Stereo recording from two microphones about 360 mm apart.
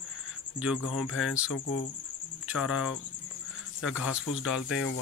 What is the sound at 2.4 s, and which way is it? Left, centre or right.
Cricket, centre.